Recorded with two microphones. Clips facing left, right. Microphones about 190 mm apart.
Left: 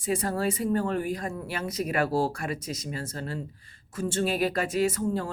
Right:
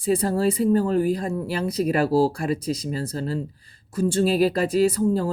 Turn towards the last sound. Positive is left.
turn(degrees=-35)  # may be behind; listen again after turning